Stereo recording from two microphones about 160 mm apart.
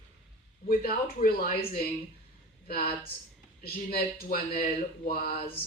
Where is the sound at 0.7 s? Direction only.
70° left (ahead or behind).